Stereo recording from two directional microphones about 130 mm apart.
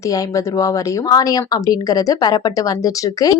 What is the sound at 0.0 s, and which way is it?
A woman's voice, 25° left (ahead or behind).